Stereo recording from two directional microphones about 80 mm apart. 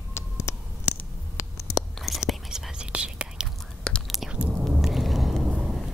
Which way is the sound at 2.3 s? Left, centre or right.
Centre.